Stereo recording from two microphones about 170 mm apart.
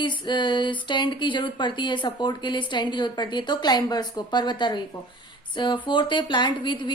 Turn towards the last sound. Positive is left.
turn(degrees=25)  # may be behind; listen again after turning